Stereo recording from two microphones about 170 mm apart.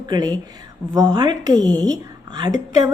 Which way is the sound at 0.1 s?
25° right (ahead or behind).